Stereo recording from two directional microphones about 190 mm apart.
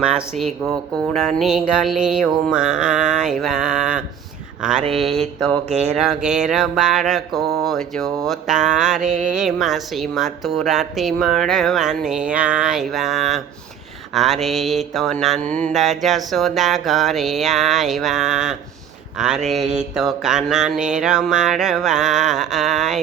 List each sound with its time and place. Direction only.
0.0 s mantra: 5° right (ahead or behind)
5.6 s speech: 35° right (ahead or behind)
6.0 s mantra: centre (ahead or behind)
19.1 s speech: 5° right (ahead or behind)
19.7 s mantra: 5° right (ahead or behind)